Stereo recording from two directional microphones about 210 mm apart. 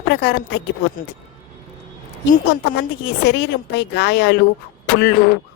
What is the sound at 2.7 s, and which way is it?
A woman's voice, 55° left (ahead or behind).